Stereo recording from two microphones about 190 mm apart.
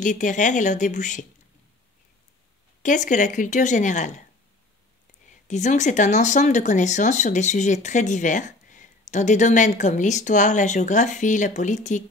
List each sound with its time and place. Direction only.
0.0 s speech: 40° left (ahead or behind)
2.8 s speech: 40° left (ahead or behind)
5.5 s speech: 40° left (ahead or behind)